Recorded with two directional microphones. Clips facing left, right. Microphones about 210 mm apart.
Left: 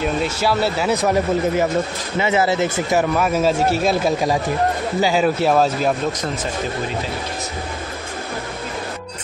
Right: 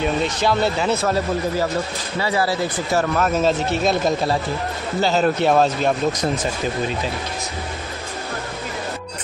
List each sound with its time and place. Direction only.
0.0 s speech: 5° left (ahead or behind)
0.9 s speech: 15° left (ahead or behind)
2.9 s speech: 10° left (ahead or behind)